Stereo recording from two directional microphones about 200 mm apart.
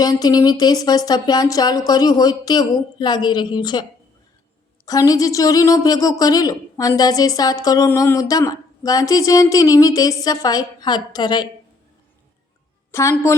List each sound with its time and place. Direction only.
0.0 s a sound: 20° left (ahead or behind)
4.9 s speech: 15° left (ahead or behind)
12.9 s a woman's voice: 15° left (ahead or behind)